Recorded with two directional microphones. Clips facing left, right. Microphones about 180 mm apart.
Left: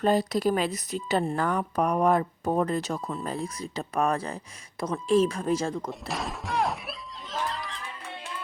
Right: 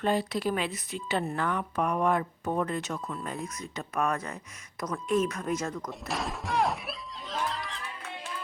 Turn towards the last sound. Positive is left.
turn(degrees=0)  # may be behind; listen again after turning